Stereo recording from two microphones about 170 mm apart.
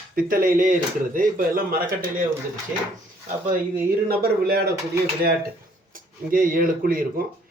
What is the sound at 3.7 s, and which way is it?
Speech, 65° right (ahead or behind).